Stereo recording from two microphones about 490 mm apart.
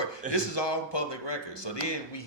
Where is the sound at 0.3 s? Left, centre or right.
Left.